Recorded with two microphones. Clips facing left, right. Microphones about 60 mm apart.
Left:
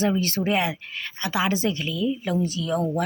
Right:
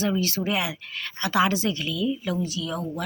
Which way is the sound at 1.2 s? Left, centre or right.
Centre.